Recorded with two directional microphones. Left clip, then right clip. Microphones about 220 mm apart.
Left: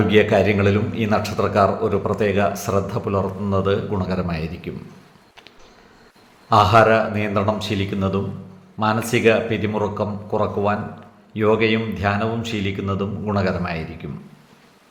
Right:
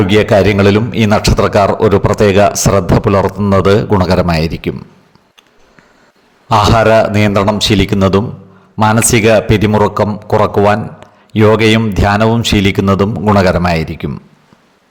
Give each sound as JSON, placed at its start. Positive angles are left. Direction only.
{"t": 0.1, "sound": "a man's voice", "side_deg": -45}
{"t": 6.5, "sound": "a man's voice", "side_deg": -50}